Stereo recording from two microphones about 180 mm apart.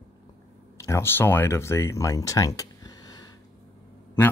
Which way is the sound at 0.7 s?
15° left (ahead or behind).